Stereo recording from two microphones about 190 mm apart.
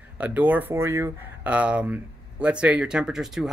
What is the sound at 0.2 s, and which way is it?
Speech, 10° right (ahead or behind).